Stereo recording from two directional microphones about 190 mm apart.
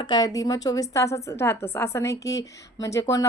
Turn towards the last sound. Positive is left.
turn(degrees=15)  # may be behind; listen again after turning